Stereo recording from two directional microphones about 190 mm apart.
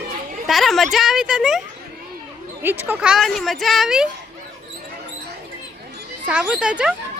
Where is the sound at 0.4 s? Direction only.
Centre (ahead or behind).